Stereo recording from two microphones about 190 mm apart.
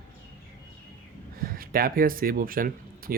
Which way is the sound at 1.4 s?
50° right (ahead or behind).